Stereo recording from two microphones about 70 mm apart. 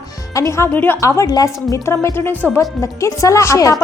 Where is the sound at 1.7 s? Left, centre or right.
Left.